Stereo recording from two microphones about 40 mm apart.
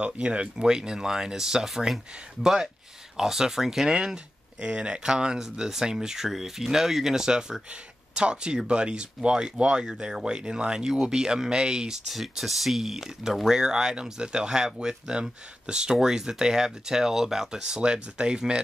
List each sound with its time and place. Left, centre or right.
0.0 s speech: right; by 3.9 s centre
3.9 s speech: right
12.1 s speech: centre; by 18.6 s right